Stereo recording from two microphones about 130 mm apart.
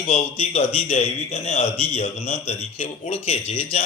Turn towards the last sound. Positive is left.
turn(degrees=55)  # may be behind; listen again after turning